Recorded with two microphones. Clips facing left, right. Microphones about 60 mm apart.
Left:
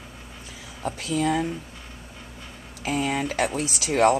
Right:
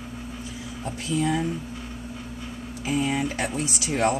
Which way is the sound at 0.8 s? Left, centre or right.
Left.